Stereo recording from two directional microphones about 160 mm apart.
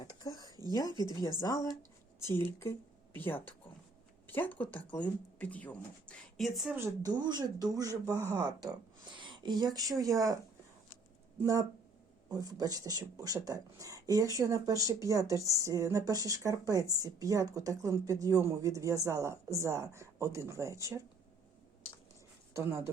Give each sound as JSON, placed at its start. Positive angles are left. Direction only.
{"t": 0.0, "sound": "a sound", "side_deg": 25}
{"t": 0.3, "sound": "a sound", "side_deg": -25}
{"t": 0.7, "sound": "a woman's voice", "side_deg": 25}
{"t": 6.7, "sound": "speech", "side_deg": -15}
{"t": 7.1, "sound": "speech", "side_deg": -25}
{"t": 12.3, "sound": "speech", "side_deg": -25}
{"t": 22.5, "sound": "speech", "side_deg": -15}